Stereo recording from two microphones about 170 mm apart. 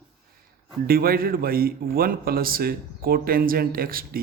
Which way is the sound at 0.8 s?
60° right (ahead or behind).